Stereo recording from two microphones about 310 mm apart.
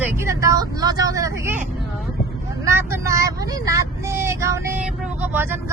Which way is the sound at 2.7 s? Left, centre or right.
Centre.